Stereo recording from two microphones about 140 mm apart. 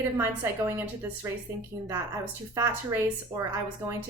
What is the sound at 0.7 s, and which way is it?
Speech, 15° right (ahead or behind).